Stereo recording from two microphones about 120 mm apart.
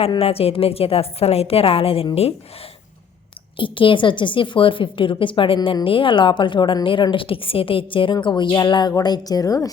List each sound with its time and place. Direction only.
0.2 s a woman's voice: 55° left (ahead or behind)
3.6 s a woman's voice: 45° left (ahead or behind); by 9.6 s 30° left (ahead or behind)